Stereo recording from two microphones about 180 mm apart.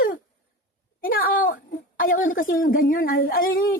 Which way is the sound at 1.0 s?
55° left (ahead or behind).